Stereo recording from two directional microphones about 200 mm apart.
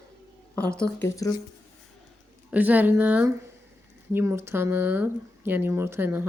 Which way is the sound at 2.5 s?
10° right (ahead or behind).